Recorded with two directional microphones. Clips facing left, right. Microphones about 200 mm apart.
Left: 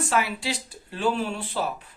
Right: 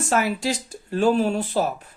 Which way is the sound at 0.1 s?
45° right (ahead or behind).